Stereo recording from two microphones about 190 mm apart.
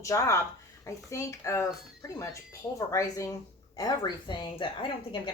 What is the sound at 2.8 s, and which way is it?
Speech, 20° left (ahead or behind).